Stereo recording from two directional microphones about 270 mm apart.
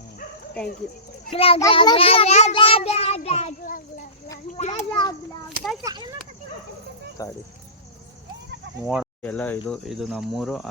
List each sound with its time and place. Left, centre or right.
1.3 s a child's voice: left
5.8 s speech: centre
7.2 s speech: centre
8.9 s speech: centre